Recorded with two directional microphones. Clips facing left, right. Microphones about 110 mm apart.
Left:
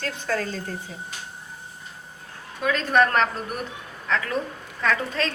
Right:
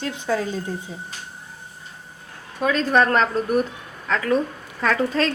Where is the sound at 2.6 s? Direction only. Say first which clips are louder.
Right 2 dB; 30° right (ahead or behind).